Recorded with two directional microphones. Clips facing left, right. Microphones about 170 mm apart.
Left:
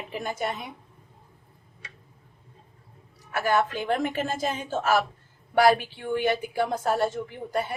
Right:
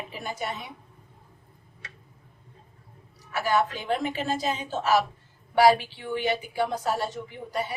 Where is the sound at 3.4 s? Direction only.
50° left (ahead or behind).